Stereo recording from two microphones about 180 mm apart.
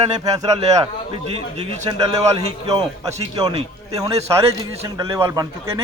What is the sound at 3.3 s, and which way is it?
Speech, 35° right (ahead or behind).